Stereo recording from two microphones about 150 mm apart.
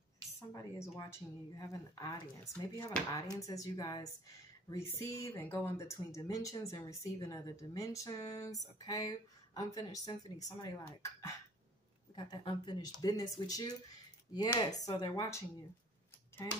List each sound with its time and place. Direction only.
0.5 s speech: 25° left (ahead or behind)
16.4 s speech: 25° left (ahead or behind)